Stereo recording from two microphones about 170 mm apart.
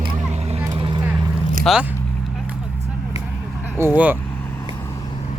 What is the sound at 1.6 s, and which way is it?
Speech, centre (ahead or behind).